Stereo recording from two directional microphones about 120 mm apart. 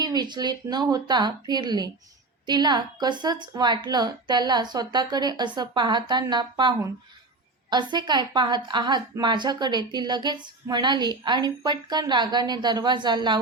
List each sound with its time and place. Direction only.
0.0 s a woman's voice: 35° right (ahead or behind)